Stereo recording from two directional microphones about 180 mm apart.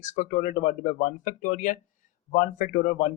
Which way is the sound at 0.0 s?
45° left (ahead or behind).